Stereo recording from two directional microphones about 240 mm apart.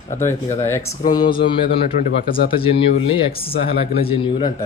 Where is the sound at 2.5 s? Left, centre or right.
Left.